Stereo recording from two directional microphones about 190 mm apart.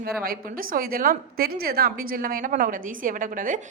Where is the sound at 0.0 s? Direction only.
50° right (ahead or behind).